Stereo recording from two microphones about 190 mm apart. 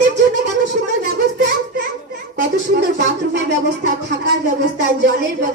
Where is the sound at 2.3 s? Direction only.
65° right (ahead or behind).